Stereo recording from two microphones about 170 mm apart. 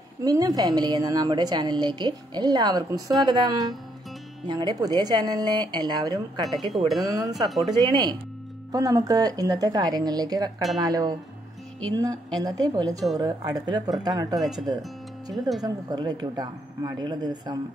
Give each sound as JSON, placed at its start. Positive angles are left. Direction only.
{"t": 0.2, "sound": "a woman's voice", "side_deg": -20}
{"t": 7.4, "sound": "speech", "side_deg": 0}
{"t": 7.7, "sound": "a woman's voice", "side_deg": -25}
{"t": 15.6, "sound": "a woman's voice", "side_deg": -25}